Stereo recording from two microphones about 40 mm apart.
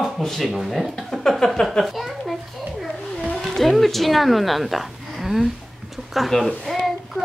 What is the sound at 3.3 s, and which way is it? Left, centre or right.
Speech, centre.